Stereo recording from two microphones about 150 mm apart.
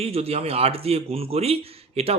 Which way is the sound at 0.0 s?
40° right (ahead or behind).